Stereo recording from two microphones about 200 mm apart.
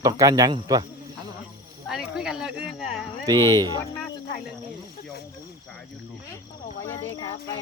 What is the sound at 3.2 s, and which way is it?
Speech, 20° right (ahead or behind).